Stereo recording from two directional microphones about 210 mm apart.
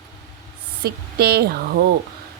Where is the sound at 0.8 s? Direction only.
50° right (ahead or behind).